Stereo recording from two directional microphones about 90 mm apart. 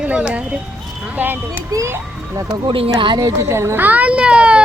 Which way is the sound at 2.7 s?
80° right.